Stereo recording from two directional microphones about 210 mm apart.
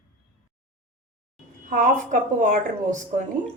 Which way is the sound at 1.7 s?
40° right (ahead or behind).